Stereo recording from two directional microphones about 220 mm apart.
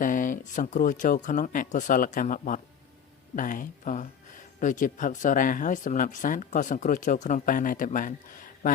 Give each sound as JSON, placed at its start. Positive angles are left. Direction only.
{"t": 0.0, "sound": "speech", "side_deg": 35}